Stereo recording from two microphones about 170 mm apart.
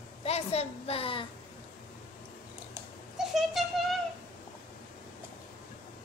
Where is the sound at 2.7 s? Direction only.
Centre (ahead or behind).